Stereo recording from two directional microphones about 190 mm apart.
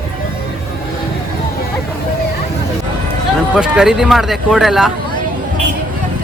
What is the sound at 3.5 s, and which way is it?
Speech, 5° right (ahead or behind).